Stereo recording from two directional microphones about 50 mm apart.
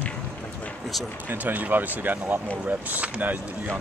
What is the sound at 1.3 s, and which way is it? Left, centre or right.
Speech, right.